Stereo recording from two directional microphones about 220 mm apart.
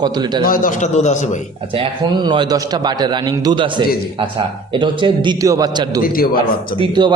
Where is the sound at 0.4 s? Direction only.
40° left (ahead or behind).